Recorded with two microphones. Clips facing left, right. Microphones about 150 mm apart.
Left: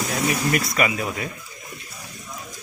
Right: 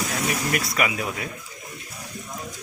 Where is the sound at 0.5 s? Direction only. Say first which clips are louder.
Left 3 dB; 5° right (ahead or behind).